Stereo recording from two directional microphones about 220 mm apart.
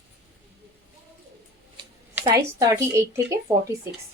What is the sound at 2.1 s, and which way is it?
A woman's voice, 15° right (ahead or behind).